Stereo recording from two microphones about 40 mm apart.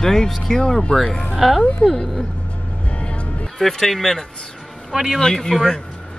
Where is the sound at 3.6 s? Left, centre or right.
Centre.